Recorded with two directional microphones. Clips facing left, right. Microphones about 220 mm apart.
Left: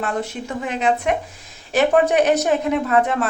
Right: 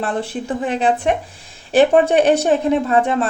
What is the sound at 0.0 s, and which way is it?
A woman's voice, 30° right (ahead or behind).